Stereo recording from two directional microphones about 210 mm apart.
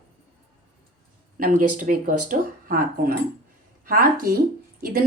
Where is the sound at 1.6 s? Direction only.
90° right.